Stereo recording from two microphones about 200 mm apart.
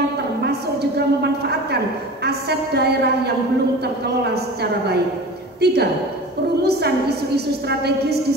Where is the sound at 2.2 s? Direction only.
55° right (ahead or behind).